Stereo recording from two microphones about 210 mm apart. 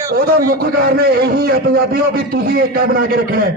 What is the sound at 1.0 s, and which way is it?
A man's voice, 45° right (ahead or behind).